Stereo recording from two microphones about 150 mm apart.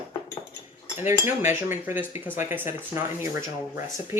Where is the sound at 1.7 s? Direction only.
15° right (ahead or behind).